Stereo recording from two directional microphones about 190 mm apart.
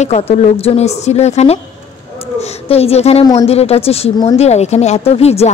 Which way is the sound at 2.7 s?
30° left (ahead or behind).